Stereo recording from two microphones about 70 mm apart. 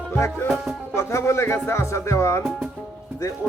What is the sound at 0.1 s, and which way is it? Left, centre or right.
Music, left.